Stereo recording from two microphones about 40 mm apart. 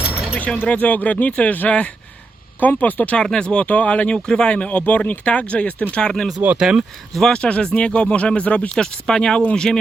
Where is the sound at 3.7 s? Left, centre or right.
Left.